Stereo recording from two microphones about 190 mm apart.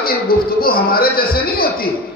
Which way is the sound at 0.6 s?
50° left (ahead or behind).